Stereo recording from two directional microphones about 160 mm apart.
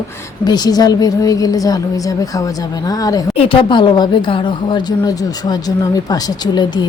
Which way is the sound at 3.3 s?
35° left (ahead or behind).